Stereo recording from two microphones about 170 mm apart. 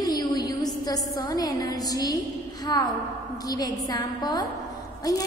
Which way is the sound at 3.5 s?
20° left (ahead or behind).